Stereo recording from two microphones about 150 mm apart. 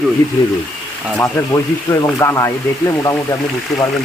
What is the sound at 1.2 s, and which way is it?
Speech, 20° left (ahead or behind).